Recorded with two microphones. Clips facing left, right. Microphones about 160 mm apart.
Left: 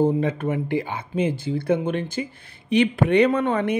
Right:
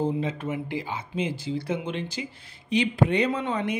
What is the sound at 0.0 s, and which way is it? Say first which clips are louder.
Speech: left 6 dB; 55° left (ahead or behind).